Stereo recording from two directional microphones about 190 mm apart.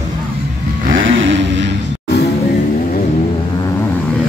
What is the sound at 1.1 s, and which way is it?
Vehicle, 80° right.